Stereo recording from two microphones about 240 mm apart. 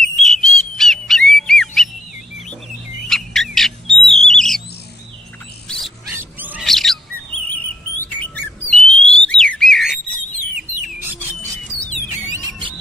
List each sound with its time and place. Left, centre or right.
0.0 s bird: centre
3.1 s bird: centre
5.7 s a sound: centre
6.1 s bird: centre
12.3 s music: centre